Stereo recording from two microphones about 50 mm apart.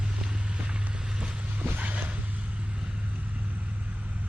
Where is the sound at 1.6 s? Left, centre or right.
Right.